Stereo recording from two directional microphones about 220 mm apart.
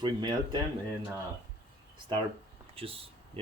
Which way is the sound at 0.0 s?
20° right (ahead or behind).